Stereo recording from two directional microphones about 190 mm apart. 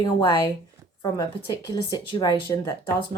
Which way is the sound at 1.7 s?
20° left (ahead or behind).